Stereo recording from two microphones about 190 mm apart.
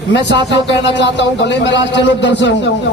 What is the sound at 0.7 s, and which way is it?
A man's voice, 65° left (ahead or behind).